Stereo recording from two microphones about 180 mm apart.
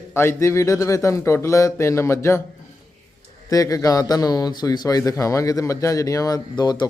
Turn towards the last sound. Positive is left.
turn(degrees=25)  # may be behind; listen again after turning